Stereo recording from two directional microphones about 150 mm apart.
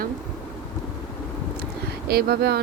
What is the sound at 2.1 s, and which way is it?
Speech, 90° right.